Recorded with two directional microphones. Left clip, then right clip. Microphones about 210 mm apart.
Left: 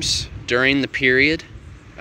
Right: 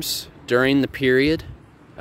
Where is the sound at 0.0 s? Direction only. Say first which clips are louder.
Left 6 dB; 25° right (ahead or behind).